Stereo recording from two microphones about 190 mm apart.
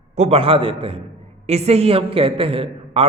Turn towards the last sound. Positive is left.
turn(degrees=-30)  # may be behind; listen again after turning